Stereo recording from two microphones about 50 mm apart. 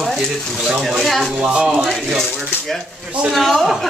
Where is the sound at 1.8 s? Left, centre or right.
Centre.